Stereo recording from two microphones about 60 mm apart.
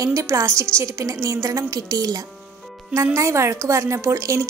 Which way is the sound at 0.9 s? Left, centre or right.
Right.